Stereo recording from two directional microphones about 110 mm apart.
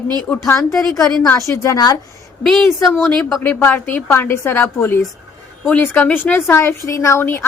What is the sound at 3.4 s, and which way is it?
A woman's voice, 20° left (ahead or behind).